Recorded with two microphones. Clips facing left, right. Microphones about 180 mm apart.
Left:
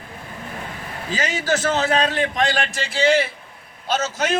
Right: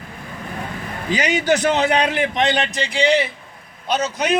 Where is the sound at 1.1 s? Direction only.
20° right (ahead or behind).